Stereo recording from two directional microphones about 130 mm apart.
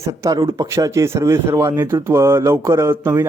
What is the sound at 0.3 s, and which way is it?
Speech, 35° right (ahead or behind).